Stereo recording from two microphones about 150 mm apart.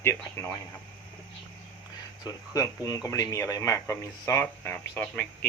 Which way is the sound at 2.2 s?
25° left (ahead or behind).